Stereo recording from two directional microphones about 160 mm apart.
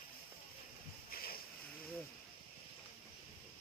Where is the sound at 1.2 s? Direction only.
70° left (ahead or behind).